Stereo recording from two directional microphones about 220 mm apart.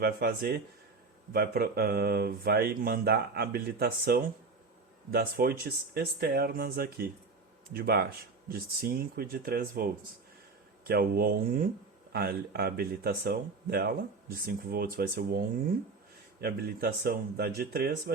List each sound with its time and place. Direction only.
0.0 s speech: 45° right (ahead or behind)